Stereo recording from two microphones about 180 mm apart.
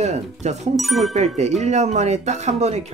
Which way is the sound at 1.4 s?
40° right (ahead or behind).